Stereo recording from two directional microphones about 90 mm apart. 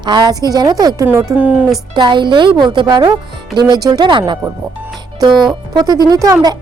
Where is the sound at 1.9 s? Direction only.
60° right (ahead or behind).